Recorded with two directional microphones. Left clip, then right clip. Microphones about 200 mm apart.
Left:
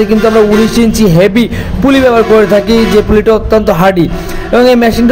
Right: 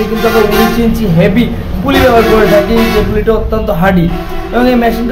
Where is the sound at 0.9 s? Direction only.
45° left (ahead or behind).